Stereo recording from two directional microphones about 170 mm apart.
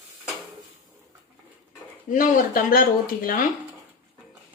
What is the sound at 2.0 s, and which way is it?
Speech, 50° left (ahead or behind).